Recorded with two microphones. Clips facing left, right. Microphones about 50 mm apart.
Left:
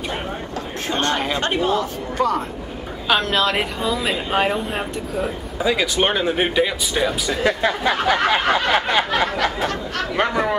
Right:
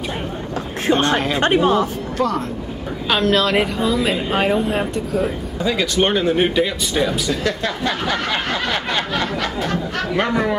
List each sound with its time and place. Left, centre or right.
0.9 s speech: centre
1.4 s a woman's voice: right
2.1 s a woman's voice: centre
7.4 s a sound: centre
10.1 s a woman's voice: centre